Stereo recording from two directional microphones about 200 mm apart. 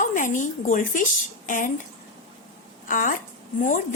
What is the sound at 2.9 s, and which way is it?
Speech, 40° left (ahead or behind).